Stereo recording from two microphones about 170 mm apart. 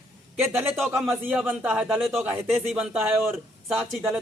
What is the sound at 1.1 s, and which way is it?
A man's voice, 10° right (ahead or behind).